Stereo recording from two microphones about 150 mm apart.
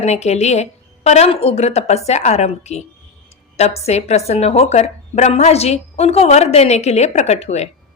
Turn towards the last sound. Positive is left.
turn(degrees=45)  # may be behind; listen again after turning